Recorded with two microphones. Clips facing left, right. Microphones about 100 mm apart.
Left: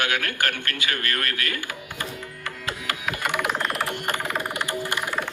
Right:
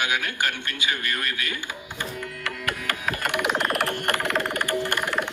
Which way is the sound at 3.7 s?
60° right (ahead or behind).